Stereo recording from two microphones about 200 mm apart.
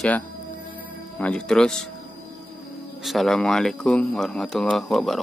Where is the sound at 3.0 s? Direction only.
Centre (ahead or behind).